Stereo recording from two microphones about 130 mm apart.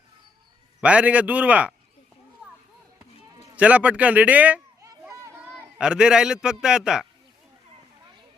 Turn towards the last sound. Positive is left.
turn(degrees=-5)  # may be behind; listen again after turning